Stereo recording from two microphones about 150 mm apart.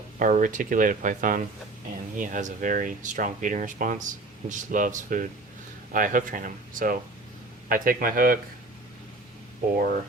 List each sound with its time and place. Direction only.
0.2 s speech: 60° right (ahead or behind)